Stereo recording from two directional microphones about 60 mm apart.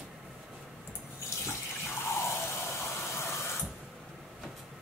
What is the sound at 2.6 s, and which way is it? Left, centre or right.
Vehicle, left.